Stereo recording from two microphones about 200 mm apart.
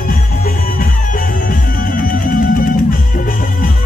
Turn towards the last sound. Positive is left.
turn(degrees=45)  # may be behind; listen again after turning